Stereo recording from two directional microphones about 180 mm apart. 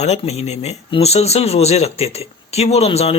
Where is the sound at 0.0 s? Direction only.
35° left (ahead or behind).